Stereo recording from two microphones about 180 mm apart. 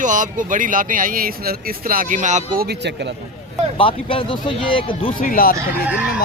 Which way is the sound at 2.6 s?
65° right (ahead or behind).